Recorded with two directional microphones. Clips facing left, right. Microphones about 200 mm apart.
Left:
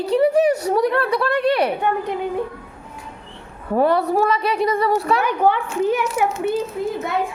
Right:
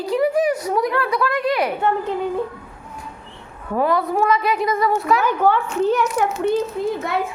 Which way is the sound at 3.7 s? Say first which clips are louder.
Left 2 dB; 30° left (ahead or behind).